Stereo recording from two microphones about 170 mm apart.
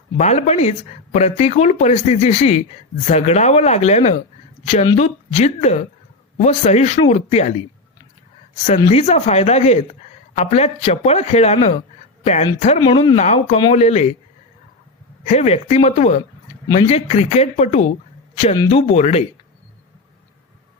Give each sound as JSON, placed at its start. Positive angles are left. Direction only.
{"t": 0.2, "sound": "speech", "side_deg": 40}
{"t": 8.9, "sound": "speech", "side_deg": 40}
{"t": 13.1, "sound": "speech", "side_deg": 45}
{"t": 15.2, "sound": "speech", "side_deg": 40}